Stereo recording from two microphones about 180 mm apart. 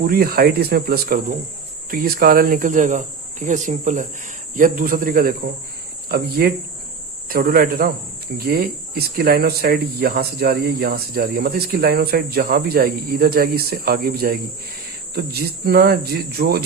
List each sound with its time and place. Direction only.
0.0 s speech: 55° right (ahead or behind)